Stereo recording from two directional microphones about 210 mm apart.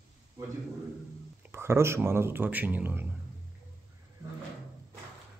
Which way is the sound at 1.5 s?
10° right (ahead or behind).